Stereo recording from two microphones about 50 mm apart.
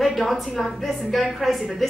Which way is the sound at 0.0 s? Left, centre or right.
Centre.